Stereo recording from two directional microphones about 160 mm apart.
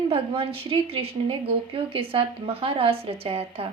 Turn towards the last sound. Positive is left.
turn(degrees=-40)  # may be behind; listen again after turning